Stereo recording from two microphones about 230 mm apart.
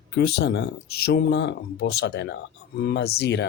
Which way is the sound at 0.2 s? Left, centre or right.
Left.